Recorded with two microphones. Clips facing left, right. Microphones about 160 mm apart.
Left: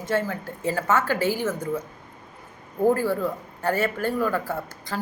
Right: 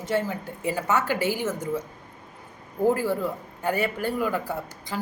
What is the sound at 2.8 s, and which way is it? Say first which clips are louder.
A man's voice: left 2 dB; 15° right (ahead or behind).